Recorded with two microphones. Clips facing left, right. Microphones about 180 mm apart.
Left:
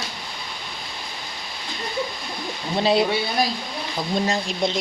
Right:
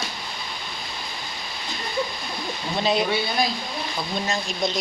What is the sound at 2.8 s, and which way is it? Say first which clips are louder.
Speech: left 4 dB; 30° left (ahead or behind).